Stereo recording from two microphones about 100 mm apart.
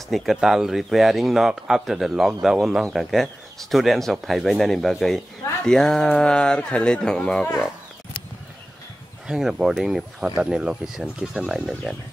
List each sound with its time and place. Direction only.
0.1 s speech: centre (ahead or behind)
9.3 s speech: 5° right (ahead or behind)